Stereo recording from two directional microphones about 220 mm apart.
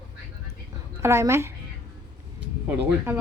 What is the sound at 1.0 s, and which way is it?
Speech, 10° right (ahead or behind).